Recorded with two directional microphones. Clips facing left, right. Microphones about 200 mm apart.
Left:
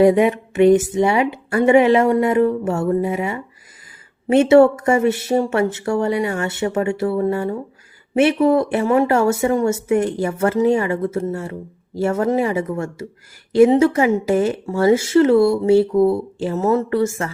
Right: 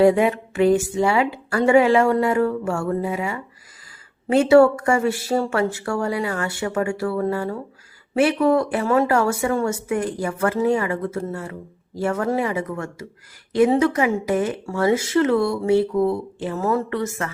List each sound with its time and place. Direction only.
0.0 s speech: 20° left (ahead or behind)